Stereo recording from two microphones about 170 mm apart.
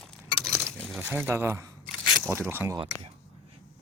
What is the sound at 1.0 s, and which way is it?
Speech, 10° right (ahead or behind).